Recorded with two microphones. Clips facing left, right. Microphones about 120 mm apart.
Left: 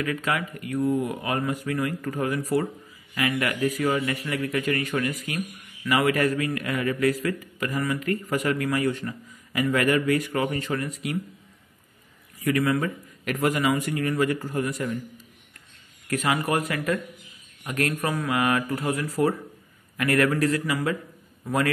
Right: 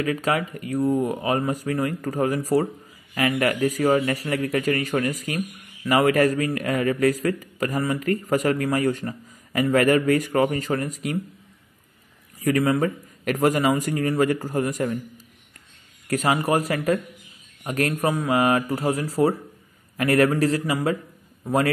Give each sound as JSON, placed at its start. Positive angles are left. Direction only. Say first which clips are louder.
{"t": 0.0, "sound": "a man's voice", "louder": "right 4 dB", "side_deg": -35}
{"t": 12.4, "sound": "a man's voice", "louder": "right 3 dB", "side_deg": -35}
{"t": 16.1, "sound": "a man's voice", "louder": "right 3 dB", "side_deg": -35}